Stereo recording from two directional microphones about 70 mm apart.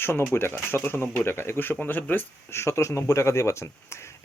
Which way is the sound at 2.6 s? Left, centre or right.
Left.